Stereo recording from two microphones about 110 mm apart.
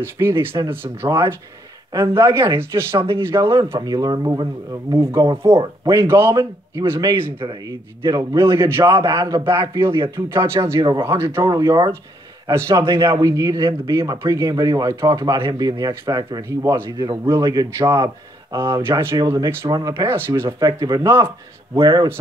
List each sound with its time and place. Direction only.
0.0 s a man's voice: 20° right (ahead or behind)
6.3 s a man's voice: 30° right (ahead or behind)
19.1 s a man's voice: 35° right (ahead or behind)
20.4 s a man's voice: 35° right (ahead or behind)